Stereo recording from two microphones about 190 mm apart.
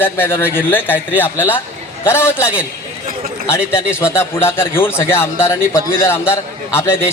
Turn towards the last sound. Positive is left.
turn(degrees=15)  # may be behind; listen again after turning